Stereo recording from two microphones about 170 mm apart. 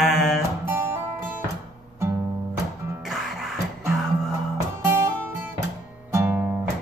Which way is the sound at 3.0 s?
Centre (ahead or behind).